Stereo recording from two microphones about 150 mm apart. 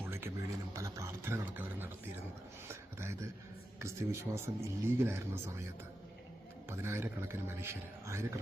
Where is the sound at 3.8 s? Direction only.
20° right (ahead or behind).